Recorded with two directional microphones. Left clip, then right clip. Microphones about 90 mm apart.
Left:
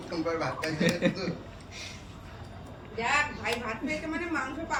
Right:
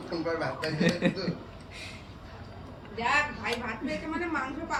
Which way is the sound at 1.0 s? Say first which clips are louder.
Left 1 dB; 30° right (ahead or behind).